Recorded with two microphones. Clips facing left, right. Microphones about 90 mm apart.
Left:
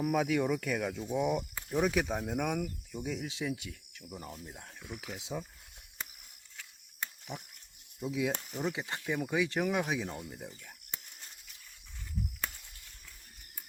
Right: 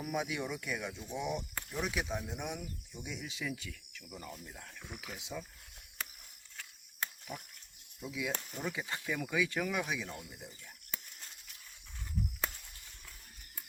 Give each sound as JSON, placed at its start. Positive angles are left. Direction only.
{"t": 0.0, "sound": "speech", "side_deg": 50}
{"t": 7.3, "sound": "speech", "side_deg": 20}
{"t": 8.0, "sound": "speech", "side_deg": 30}
{"t": 8.4, "sound": "speech", "side_deg": 10}
{"t": 8.7, "sound": "speech", "side_deg": 20}